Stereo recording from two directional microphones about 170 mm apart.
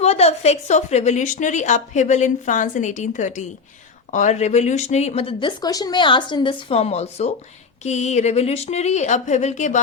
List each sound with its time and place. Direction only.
0.0 s a woman's voice: 40° left (ahead or behind)